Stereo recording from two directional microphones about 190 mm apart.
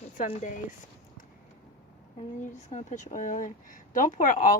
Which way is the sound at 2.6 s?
40° left (ahead or behind).